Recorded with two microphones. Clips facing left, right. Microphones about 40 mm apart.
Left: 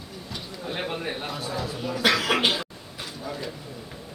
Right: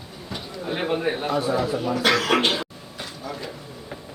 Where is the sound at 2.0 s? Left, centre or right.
Centre.